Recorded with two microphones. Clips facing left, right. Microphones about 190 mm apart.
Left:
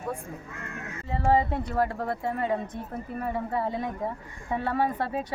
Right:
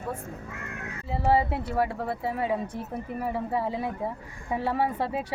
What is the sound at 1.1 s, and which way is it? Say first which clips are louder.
Speech: even; 10° right (ahead or behind).